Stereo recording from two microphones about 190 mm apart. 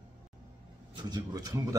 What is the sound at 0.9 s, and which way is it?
Speech, 20° right (ahead or behind).